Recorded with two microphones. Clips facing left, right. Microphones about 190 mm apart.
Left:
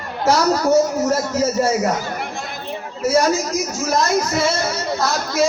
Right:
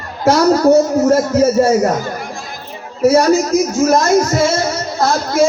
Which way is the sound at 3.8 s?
50° right (ahead or behind).